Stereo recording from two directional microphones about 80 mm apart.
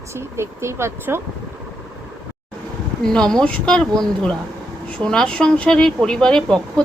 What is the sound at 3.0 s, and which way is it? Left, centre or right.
Speech, centre.